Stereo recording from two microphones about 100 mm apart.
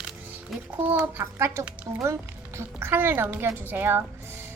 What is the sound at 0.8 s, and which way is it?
A woman's voice, 20° right (ahead or behind).